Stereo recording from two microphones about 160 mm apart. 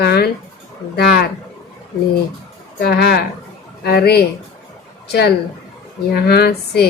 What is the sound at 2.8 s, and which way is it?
Speech, 80° left.